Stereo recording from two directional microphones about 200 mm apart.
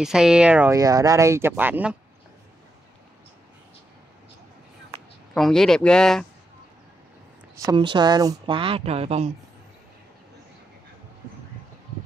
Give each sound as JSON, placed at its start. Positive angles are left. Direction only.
{"t": 0.0, "sound": "speech", "side_deg": -5}
{"t": 0.7, "sound": "speech", "side_deg": -15}
{"t": 5.3, "sound": "speech", "side_deg": 5}
{"t": 7.6, "sound": "speech", "side_deg": -25}